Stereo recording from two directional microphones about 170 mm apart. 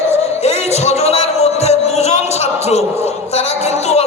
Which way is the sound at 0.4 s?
40° left (ahead or behind).